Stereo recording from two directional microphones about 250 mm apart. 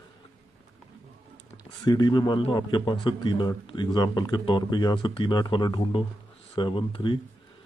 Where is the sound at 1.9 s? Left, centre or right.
Centre.